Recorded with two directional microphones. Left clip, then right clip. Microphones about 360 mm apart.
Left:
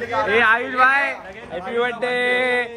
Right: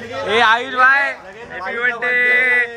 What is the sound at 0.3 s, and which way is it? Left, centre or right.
Speech, centre.